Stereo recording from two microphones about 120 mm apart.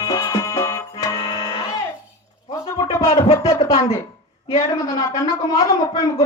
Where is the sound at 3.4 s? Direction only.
25° left (ahead or behind).